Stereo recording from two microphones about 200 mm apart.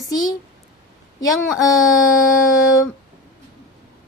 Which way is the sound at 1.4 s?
Centre (ahead or behind).